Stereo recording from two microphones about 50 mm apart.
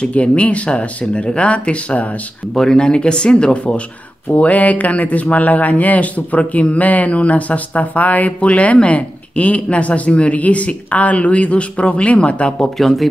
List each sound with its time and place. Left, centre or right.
0.0 s speech: left
2.5 s speech: centre
12.5 s speech: centre